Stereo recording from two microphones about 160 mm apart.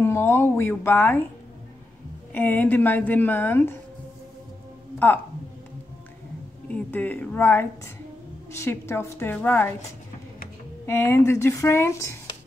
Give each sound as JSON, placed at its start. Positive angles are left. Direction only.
{"t": 0.0, "sound": "a woman's voice", "side_deg": 15}
{"t": 2.3, "sound": "a woman's voice", "side_deg": 10}
{"t": 4.9, "sound": "speech", "side_deg": 10}
{"t": 6.7, "sound": "a woman's voice", "side_deg": 10}
{"t": 10.9, "sound": "a woman's voice", "side_deg": 15}